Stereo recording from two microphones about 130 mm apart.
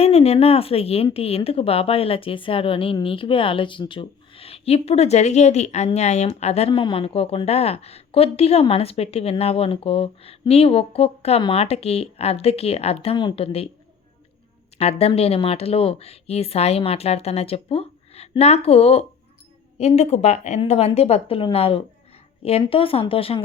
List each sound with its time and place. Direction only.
0.0 s a woman's voice: 50° left (ahead or behind)
14.8 s a woman's voice: 50° left (ahead or behind)
20.6 s a woman's voice: 50° left (ahead or behind)